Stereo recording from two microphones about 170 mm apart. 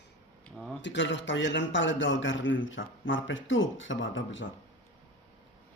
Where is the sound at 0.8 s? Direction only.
90° left.